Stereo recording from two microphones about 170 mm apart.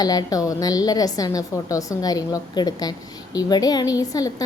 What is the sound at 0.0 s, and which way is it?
A woman's voice, 20° left (ahead or behind).